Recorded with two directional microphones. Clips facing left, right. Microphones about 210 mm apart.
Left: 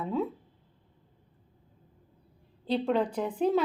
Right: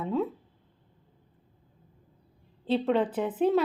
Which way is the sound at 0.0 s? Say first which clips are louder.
Right 2 dB; centre (ahead or behind).